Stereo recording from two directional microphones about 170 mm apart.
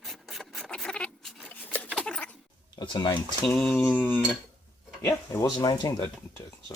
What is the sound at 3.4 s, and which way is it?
Speech, 10° left (ahead or behind).